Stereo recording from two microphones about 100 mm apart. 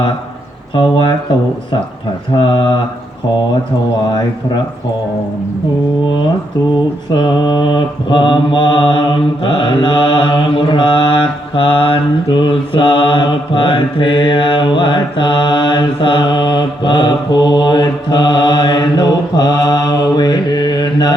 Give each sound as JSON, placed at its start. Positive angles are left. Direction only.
{"t": 0.7, "sound": "speech", "side_deg": 60}
{"t": 2.3, "sound": "speech", "side_deg": 40}
{"t": 7.1, "sound": "mantra", "side_deg": 50}